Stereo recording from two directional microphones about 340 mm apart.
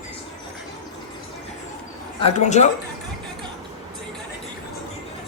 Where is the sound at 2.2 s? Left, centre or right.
Centre.